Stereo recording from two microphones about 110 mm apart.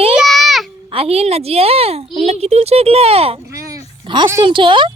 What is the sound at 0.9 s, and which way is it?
A woman's voice, 60° right (ahead or behind).